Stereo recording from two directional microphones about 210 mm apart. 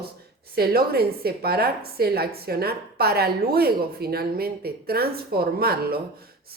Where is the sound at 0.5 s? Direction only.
50° right (ahead or behind).